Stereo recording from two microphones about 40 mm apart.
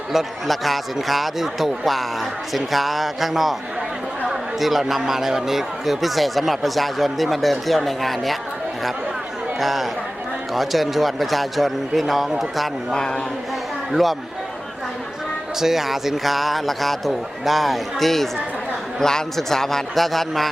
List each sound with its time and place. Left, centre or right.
0.1 s a man's voice: centre
9.6 s a man's voice: centre
12.9 s a man's voice: centre
13.9 s a man's voice: centre
15.6 s a man's voice: centre